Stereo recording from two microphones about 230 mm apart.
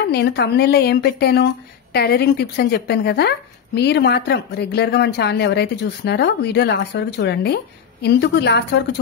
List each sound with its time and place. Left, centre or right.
0.1 s a woman's voice: left